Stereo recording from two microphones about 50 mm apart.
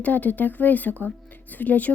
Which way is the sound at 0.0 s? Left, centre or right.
Left.